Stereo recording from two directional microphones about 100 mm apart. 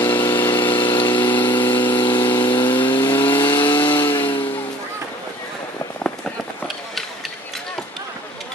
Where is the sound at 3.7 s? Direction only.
55° left (ahead or behind).